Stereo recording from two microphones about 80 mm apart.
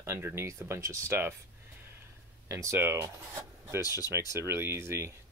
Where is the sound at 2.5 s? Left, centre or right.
Right.